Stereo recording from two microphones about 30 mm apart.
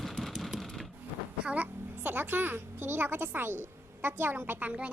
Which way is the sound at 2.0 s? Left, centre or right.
Right.